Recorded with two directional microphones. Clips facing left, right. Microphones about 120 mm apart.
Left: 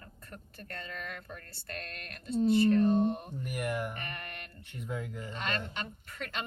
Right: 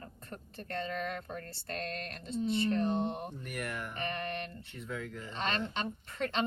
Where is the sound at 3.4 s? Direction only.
10° left (ahead or behind).